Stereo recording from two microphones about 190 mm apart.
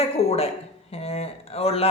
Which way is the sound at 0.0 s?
35° left (ahead or behind).